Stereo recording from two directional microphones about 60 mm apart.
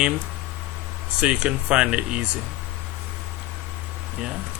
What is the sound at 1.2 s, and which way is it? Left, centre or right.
Speech, centre.